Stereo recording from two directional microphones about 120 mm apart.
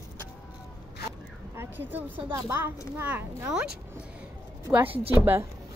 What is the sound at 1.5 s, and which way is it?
A child's voice, 20° right (ahead or behind).